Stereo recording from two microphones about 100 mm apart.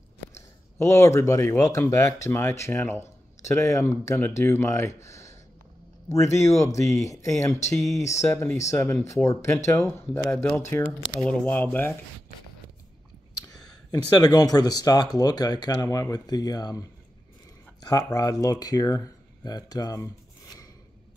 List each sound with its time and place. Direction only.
0.7 s speech: 30° left (ahead or behind)
14.2 s speech: 40° left (ahead or behind)